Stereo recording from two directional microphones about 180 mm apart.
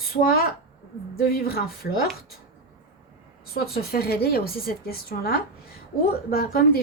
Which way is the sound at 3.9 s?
60° left (ahead or behind).